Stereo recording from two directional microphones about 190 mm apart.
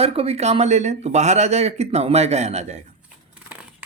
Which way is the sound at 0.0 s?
30° right (ahead or behind).